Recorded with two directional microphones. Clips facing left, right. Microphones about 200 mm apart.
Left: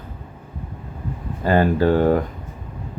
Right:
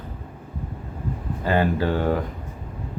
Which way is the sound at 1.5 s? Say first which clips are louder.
Left 5 dB; 45° left (ahead or behind).